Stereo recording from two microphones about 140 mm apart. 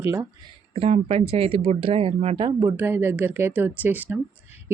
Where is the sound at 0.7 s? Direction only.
45° right (ahead or behind).